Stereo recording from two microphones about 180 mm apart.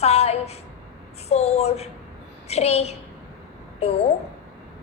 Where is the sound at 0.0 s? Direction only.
35° left (ahead or behind).